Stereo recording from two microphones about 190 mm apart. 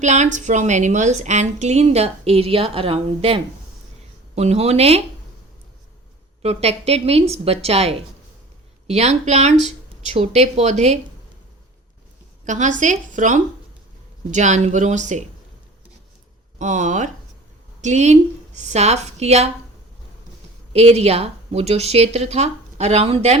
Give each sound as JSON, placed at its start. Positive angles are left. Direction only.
{"t": 0.0, "sound": "a woman's voice", "side_deg": -40}
{"t": 6.4, "sound": "a woman's voice", "side_deg": -35}
{"t": 12.5, "sound": "a woman's voice", "side_deg": -40}
{"t": 16.6, "sound": "a woman's voice", "side_deg": -40}
{"t": 20.7, "sound": "a woman's voice", "side_deg": -35}